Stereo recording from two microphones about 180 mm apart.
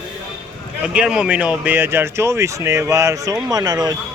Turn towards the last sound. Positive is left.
turn(degrees=-20)  # may be behind; listen again after turning